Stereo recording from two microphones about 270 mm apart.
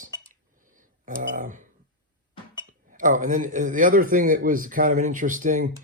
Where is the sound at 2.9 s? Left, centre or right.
Right.